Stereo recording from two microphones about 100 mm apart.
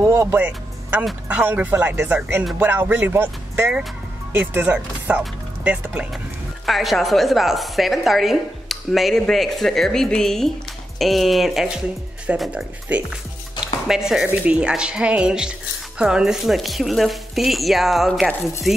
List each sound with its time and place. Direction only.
0.0 s speech: 25° right (ahead or behind)
6.6 s a woman's voice: centre (ahead or behind)
12.4 s a woman's voice: 15° right (ahead or behind)
14.2 s a woman's voice: 15° right (ahead or behind)